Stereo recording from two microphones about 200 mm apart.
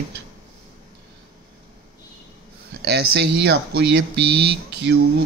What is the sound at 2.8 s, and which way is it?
Speech, 55° right (ahead or behind).